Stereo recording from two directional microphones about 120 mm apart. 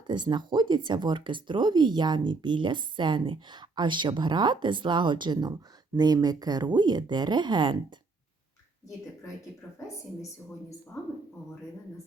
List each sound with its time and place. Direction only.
0.1 s speech: 40° right (ahead or behind)